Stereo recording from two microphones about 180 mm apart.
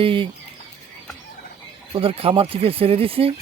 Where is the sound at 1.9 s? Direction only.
30° right (ahead or behind).